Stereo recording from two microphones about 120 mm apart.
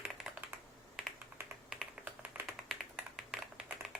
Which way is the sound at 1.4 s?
20° right (ahead or behind).